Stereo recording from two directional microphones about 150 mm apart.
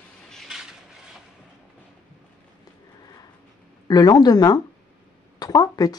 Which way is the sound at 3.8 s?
25° left (ahead or behind).